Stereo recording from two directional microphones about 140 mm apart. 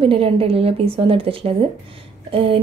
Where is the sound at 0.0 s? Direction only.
40° right (ahead or behind).